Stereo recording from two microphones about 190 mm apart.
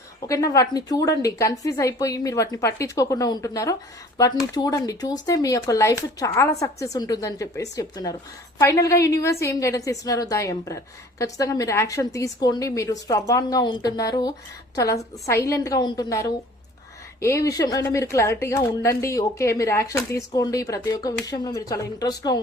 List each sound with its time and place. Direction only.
0.3 s a woman's voice: 15° left (ahead or behind)